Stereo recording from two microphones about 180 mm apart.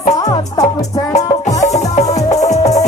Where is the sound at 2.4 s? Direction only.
40° left (ahead or behind).